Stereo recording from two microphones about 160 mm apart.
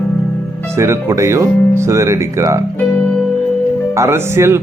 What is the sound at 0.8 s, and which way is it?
Speech, 15° right (ahead or behind).